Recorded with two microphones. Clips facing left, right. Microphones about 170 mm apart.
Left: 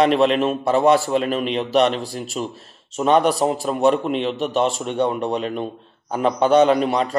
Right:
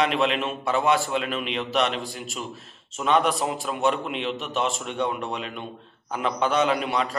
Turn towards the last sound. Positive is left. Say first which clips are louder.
# left 8 dB
turn(degrees=35)  # may be behind; listen again after turning